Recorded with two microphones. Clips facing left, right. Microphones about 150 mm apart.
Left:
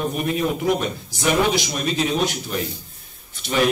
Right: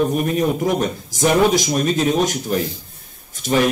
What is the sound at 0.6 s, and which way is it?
A man's voice, 45° right (ahead or behind).